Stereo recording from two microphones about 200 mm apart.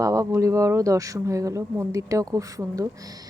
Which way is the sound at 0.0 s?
15° right (ahead or behind).